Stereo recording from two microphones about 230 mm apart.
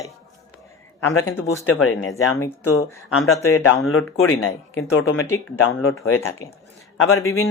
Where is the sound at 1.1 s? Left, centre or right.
Left.